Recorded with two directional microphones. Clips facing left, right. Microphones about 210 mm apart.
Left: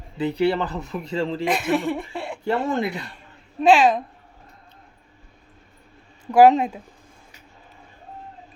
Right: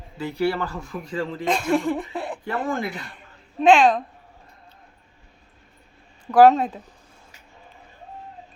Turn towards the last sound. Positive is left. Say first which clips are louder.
# even
turn(degrees=10)  # may be behind; listen again after turning